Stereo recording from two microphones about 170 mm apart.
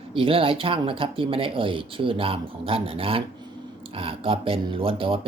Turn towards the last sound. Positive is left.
turn(degrees=-30)  # may be behind; listen again after turning